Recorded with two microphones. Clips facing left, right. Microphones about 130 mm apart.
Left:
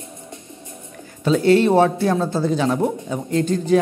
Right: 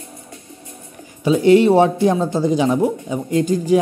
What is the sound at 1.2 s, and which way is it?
Speech, 15° right (ahead or behind).